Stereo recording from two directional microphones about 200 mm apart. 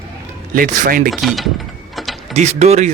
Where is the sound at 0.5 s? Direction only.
40° right (ahead or behind).